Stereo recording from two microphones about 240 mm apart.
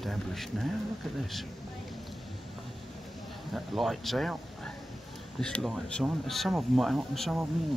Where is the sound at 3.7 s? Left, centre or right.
Centre.